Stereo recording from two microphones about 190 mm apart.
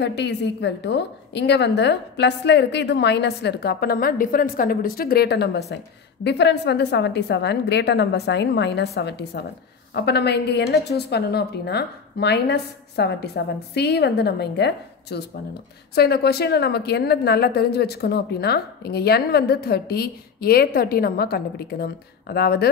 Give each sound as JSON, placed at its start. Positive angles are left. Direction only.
{"t": 0.0, "sound": "a woman's voice", "side_deg": 65}